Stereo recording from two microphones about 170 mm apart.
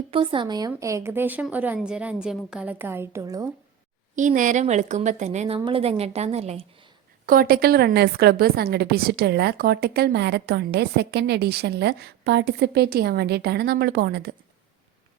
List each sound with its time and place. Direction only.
0.1 s a woman's voice: 30° right (ahead or behind)
4.1 s a woman's voice: 50° right (ahead or behind)
5.5 s a woman's voice: 30° right (ahead or behind)
7.3 s a woman's voice: 60° right (ahead or behind)